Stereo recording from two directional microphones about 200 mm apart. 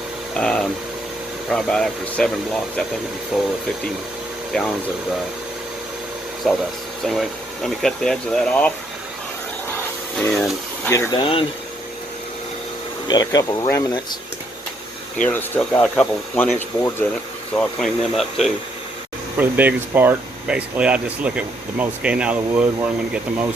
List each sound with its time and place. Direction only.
0.3 s speech: 5° left (ahead or behind)
6.5 s speech: centre (ahead or behind)
9.7 s a sound: 5° left (ahead or behind)
10.8 s speech: 15° left (ahead or behind)
13.1 s speech: 20° left (ahead or behind)
15.2 s speech: 10° left (ahead or behind); by 23.5 s 5° right (ahead or behind)